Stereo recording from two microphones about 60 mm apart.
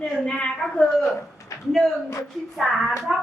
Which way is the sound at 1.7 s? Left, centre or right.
Centre.